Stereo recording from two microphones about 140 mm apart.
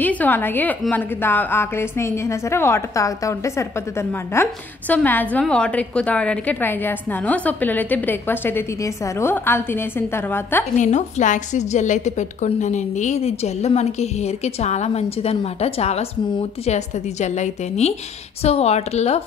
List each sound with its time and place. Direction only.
0.0 s a woman's voice: 10° left (ahead or behind)
10.8 s a woman's voice: 55° left (ahead or behind)